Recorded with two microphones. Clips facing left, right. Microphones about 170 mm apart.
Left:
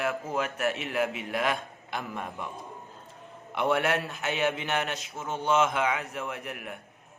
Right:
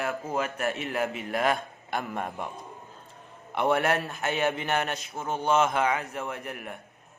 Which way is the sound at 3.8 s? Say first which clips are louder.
Right 2 dB; 45° right (ahead or behind).